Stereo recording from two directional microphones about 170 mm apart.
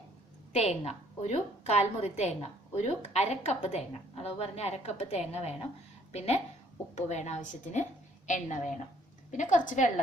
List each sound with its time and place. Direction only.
0.5 s a woman's voice: 40° left (ahead or behind)